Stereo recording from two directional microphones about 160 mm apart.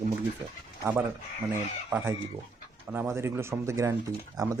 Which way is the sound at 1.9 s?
10° right (ahead or behind).